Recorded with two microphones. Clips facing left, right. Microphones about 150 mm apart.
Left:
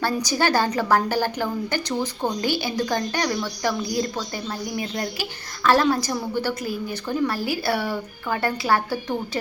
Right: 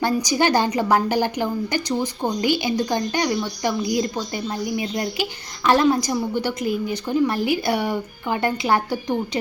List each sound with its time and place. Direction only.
0.0 s a woman's voice: 15° right (ahead or behind)